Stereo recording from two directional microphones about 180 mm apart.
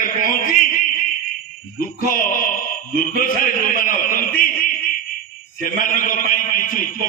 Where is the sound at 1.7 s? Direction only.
50° left (ahead or behind).